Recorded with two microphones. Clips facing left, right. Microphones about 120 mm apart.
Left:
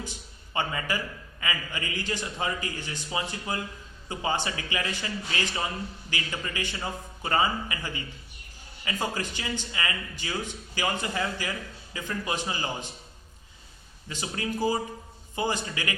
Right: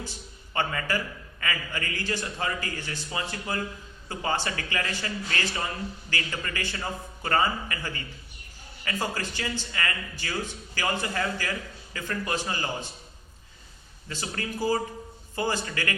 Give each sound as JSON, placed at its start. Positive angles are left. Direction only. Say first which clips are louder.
{"t": 0.0, "sound": "a sound", "louder": "even", "side_deg": 15}
{"t": 1.4, "sound": "a man's voice", "louder": "right 1 dB", "side_deg": 15}
{"t": 14.1, "sound": "a man's voice", "louder": "left 2 dB", "side_deg": 15}